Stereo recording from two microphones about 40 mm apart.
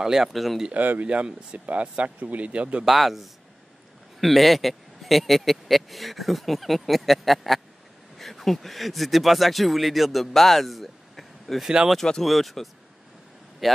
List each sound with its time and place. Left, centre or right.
0.0 s speech: centre
0.3 s speech: centre
0.7 s speech: right
1.0 s speech: right
2.8 s speech: centre